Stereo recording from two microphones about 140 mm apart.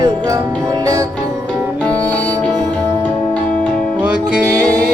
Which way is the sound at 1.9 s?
10° left (ahead or behind).